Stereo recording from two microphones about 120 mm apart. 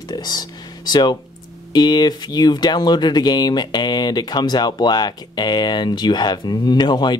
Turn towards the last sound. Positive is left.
turn(degrees=35)  # may be behind; listen again after turning